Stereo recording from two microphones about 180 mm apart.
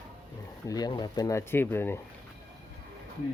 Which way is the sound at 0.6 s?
20° left (ahead or behind).